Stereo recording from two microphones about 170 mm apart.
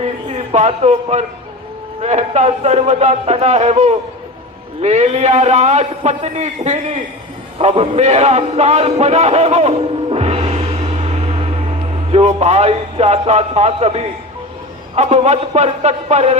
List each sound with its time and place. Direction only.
0.0 s a sound: 40° right (ahead or behind)
2.0 s a man's voice: 40° right (ahead or behind)
7.6 s music: 40° right (ahead or behind)
14.9 s a man's voice: 40° right (ahead or behind)